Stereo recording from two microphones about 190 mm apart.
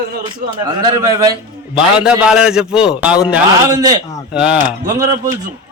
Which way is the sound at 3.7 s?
20° right (ahead or behind).